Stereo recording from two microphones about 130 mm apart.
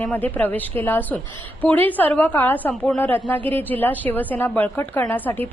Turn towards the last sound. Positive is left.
turn(degrees=15)  # may be behind; listen again after turning